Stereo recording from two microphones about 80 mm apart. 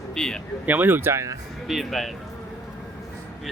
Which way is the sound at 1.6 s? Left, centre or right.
Centre.